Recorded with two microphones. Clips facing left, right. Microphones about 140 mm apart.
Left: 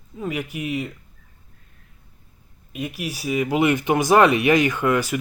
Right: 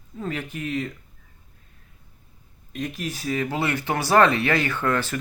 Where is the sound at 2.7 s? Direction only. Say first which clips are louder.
Left 1 dB; 10° left (ahead or behind).